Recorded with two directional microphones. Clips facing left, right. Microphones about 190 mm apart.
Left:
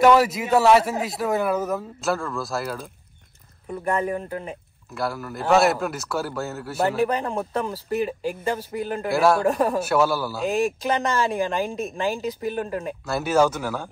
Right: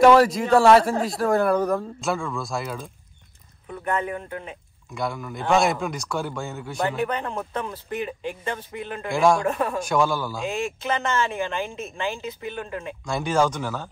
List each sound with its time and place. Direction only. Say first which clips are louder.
0.0 s speech: right 2 dB; centre (ahead or behind)
3.8 s speech: left 2 dB; 35° left (ahead or behind)
4.9 s speech: left 1 dB; 5° left (ahead or behind)
7.7 s speech: left 5 dB; 35° left (ahead or behind)
9.0 s speech: even; 5° left (ahead or behind)
9.4 s speech: left 4 dB; 35° left (ahead or behind)
9.8 s speech: left 2 dB; 5° left (ahead or behind)
10.5 s speech: left 6 dB; 35° left (ahead or behind)
13.0 s speech: left 2 dB; 5° left (ahead or behind)